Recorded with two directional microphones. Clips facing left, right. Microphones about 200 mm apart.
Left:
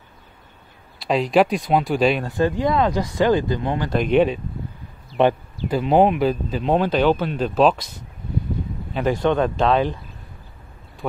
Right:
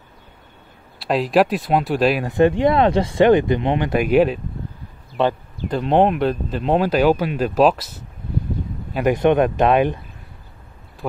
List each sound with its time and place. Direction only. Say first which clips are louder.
0.9 s speech: right 1 dB; centre (ahead or behind)
2.2 s speech: right 5 dB; 20° right (ahead or behind)
3.9 s speech: right 1 dB; 5° right (ahead or behind)
5.7 s speech: even; 5° left (ahead or behind)
8.9 s speech: right 4 dB; 15° right (ahead or behind)